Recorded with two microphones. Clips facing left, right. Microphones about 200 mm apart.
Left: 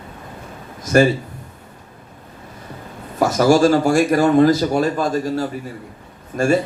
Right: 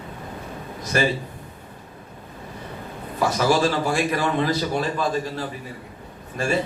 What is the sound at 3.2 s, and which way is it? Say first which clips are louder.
Speech: left 6 dB; 45° left (ahead or behind).